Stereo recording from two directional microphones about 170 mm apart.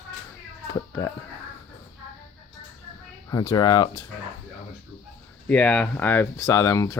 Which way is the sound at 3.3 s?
20° left (ahead or behind).